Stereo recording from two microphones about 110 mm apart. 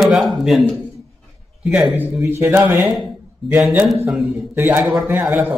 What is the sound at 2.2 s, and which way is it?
Speech, 20° right (ahead or behind).